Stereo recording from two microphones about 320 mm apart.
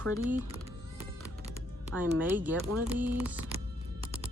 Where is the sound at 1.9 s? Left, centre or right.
Centre.